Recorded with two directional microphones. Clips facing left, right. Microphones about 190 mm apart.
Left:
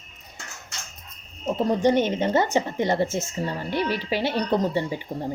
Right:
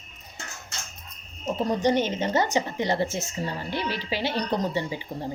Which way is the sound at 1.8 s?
55° left (ahead or behind).